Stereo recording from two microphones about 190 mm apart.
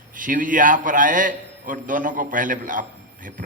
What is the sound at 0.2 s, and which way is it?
A man's voice, 45° right (ahead or behind).